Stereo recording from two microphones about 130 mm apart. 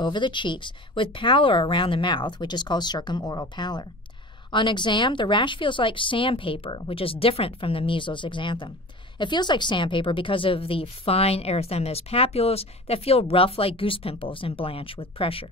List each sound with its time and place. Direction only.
0.0 s a woman's voice: 35° left (ahead or behind)